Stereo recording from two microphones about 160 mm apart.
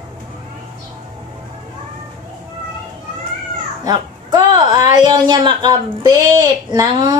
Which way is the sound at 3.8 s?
25° right (ahead or behind).